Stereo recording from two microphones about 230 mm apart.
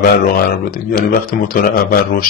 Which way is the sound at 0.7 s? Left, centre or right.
Left.